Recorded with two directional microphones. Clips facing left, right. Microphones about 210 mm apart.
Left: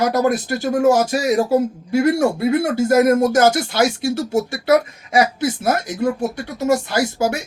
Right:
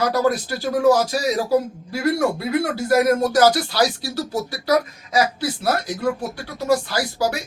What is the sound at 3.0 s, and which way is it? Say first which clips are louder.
Speech: left 2 dB; 20° left (ahead or behind).